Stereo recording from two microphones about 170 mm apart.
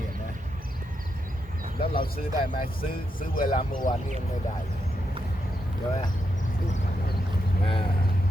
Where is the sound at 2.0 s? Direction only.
60° left (ahead or behind).